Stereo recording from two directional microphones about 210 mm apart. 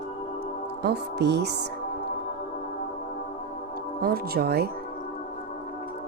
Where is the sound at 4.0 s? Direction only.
45° right (ahead or behind).